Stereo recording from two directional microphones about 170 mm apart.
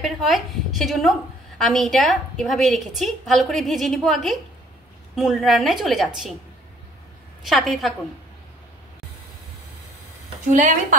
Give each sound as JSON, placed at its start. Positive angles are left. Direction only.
{"t": 0.0, "sound": "a woman's voice", "side_deg": 0}
{"t": 7.4, "sound": "a woman's voice", "side_deg": 0}
{"t": 10.5, "sound": "a woman's voice", "side_deg": -50}